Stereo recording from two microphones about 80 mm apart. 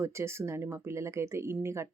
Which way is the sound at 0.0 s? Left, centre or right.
Right.